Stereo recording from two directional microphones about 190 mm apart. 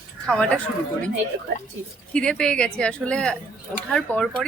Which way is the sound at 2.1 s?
5° left (ahead or behind).